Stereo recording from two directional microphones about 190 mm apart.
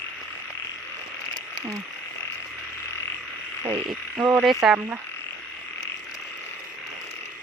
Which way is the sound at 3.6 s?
25° right (ahead or behind).